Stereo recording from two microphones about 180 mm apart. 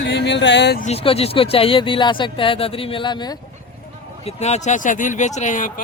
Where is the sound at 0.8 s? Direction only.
35° left (ahead or behind).